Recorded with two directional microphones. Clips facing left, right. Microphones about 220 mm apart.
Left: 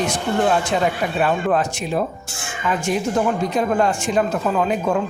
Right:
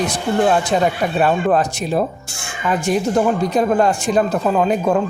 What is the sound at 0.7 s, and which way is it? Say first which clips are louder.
Speech: right 3 dB; 40° right (ahead or behind).